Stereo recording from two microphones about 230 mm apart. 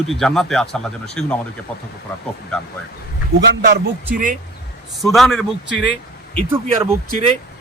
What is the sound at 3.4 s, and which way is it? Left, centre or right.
Speech, right.